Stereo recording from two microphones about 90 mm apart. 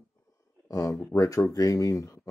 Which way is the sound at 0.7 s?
40° left (ahead or behind).